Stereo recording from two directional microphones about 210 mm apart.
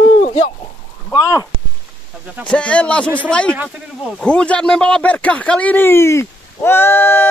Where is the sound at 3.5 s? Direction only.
5° right (ahead or behind).